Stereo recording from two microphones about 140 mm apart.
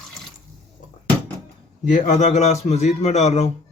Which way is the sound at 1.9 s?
60° left (ahead or behind).